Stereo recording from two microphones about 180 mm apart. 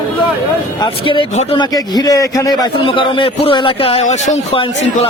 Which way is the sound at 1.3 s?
40° left (ahead or behind).